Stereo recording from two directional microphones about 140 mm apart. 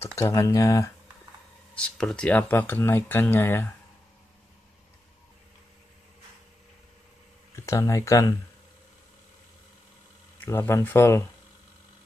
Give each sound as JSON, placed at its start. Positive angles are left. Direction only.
{"t": 0.0, "sound": "speech", "side_deg": 20}
{"t": 1.8, "sound": "speech", "side_deg": 5}
{"t": 7.5, "sound": "speech", "side_deg": 20}
{"t": 10.4, "sound": "speech", "side_deg": 15}